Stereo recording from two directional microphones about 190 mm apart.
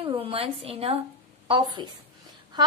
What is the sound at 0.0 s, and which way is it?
A woman's voice, 30° right (ahead or behind).